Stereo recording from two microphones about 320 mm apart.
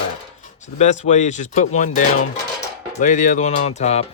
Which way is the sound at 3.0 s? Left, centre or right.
Left.